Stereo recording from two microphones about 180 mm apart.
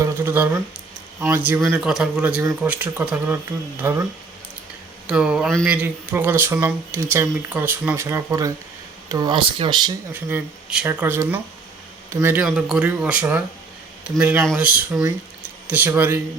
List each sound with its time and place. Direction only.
0.0 s a sound: 15° right (ahead or behind)
1.2 s speech: 10° right (ahead or behind)
5.0 s speech: 5° right (ahead or behind); by 9.9 s 25° right (ahead or behind)
10.1 s speech: 10° right (ahead or behind)